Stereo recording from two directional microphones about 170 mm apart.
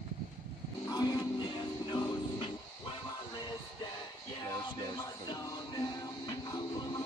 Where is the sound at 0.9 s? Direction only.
25° left (ahead or behind).